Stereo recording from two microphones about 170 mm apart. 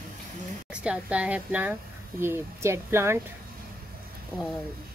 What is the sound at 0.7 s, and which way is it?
A woman's voice, 5° right (ahead or behind).